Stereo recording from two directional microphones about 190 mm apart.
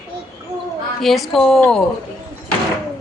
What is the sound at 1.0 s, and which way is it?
Speech, centre (ahead or behind).